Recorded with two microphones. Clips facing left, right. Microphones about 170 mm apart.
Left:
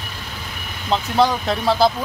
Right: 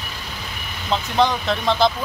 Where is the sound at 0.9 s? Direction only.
10° left (ahead or behind).